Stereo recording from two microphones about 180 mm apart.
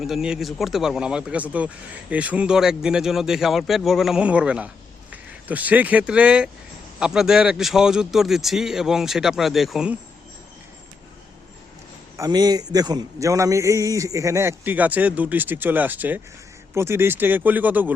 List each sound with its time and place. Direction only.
0.0 s speech: centre (ahead or behind)
12.1 s a man's voice: 20° right (ahead or behind)